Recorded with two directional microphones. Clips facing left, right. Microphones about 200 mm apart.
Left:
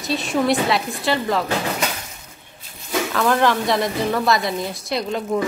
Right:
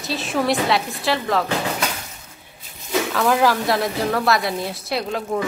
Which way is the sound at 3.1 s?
5° right (ahead or behind).